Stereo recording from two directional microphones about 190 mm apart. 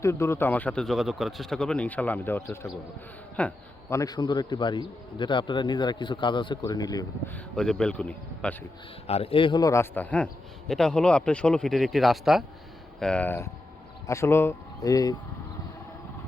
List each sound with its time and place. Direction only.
0.0 s a man's voice: 15° left (ahead or behind)
7.3 s speech: 5° left (ahead or behind)
9.0 s a man's voice: 30° left (ahead or behind)